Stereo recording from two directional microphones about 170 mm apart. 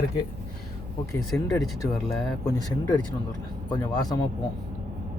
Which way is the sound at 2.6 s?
20° left (ahead or behind).